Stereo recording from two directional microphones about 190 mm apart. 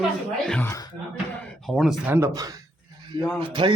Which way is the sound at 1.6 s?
Centre (ahead or behind).